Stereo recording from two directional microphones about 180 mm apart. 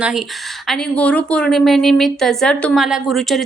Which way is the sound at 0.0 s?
5° right (ahead or behind).